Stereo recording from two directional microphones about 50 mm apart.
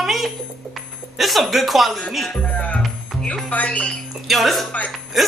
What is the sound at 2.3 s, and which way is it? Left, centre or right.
Speech, left.